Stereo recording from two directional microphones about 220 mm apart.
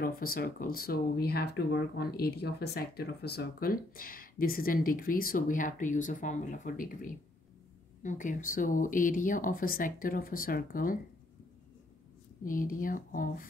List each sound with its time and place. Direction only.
0.0 s speech: 40° left (ahead or behind)
12.4 s speech: 40° left (ahead or behind)